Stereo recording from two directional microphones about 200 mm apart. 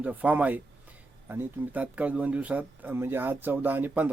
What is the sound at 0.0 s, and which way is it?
Speech, 5° right (ahead or behind).